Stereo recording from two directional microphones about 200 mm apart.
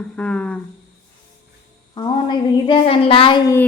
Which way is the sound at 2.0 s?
25° left (ahead or behind).